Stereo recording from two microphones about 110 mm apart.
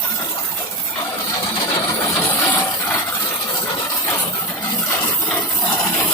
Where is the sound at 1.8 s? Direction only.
25° left (ahead or behind).